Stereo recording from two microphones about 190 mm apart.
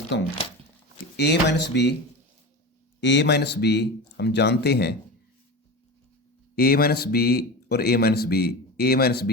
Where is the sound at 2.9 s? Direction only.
70° left (ahead or behind).